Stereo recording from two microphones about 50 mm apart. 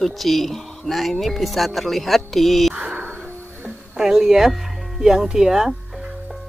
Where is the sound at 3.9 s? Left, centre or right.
Centre.